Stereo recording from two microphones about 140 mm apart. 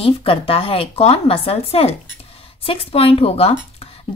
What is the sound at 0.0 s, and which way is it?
Speech, 40° left (ahead or behind).